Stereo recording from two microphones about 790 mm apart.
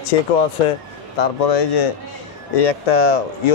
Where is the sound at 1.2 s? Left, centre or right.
Left.